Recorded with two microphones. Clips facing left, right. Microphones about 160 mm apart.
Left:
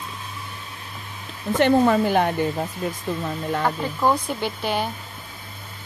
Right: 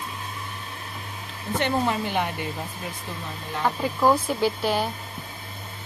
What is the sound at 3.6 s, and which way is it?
Speech, 10° right (ahead or behind).